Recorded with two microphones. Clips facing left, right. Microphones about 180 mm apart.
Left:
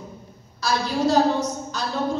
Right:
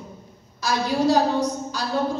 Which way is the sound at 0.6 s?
15° right (ahead or behind).